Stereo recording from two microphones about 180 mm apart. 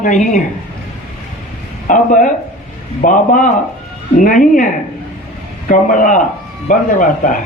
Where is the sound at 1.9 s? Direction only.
45° left (ahead or behind).